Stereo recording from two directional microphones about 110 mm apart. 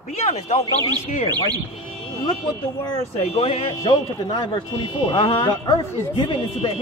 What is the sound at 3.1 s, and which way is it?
Speech, 70° left (ahead or behind).